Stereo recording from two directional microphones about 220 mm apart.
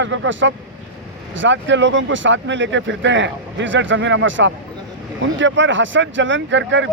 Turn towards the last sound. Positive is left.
turn(degrees=-55)  # may be behind; listen again after turning